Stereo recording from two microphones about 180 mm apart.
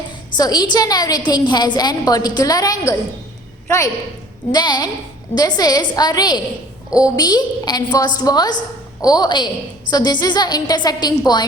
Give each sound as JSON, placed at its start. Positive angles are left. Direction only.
{"t": 0.3, "sound": "a woman's voice", "side_deg": 20}
{"t": 4.5, "sound": "a woman's voice", "side_deg": 25}